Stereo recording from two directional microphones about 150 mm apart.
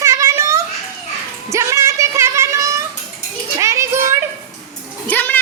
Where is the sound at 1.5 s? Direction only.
20° right (ahead or behind).